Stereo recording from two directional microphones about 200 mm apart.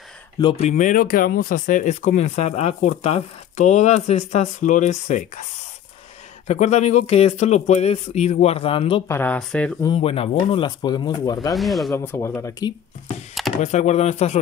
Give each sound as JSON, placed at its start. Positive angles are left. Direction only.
{"t": 0.4, "sound": "speech", "side_deg": 30}
{"t": 6.4, "sound": "speech", "side_deg": 35}
{"t": 9.0, "sound": "speech", "side_deg": 10}
{"t": 9.8, "sound": "speech", "side_deg": 30}
{"t": 11.5, "sound": "speech", "side_deg": 0}
{"t": 11.9, "sound": "speech", "side_deg": 15}
{"t": 13.6, "sound": "speech", "side_deg": 35}